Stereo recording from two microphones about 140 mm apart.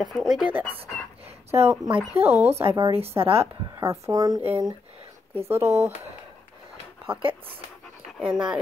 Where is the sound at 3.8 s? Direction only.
25° right (ahead or behind).